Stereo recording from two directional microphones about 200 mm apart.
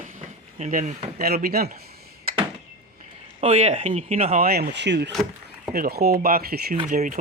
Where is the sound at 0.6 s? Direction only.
40° right (ahead or behind).